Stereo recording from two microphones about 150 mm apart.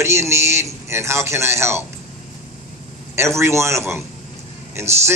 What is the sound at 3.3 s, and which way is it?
A man's voice, 20° right (ahead or behind).